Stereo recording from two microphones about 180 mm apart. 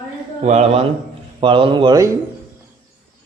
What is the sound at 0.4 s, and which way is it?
Speech, 40° right (ahead or behind).